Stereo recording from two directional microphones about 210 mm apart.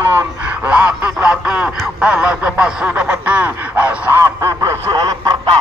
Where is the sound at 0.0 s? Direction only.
10° right (ahead or behind).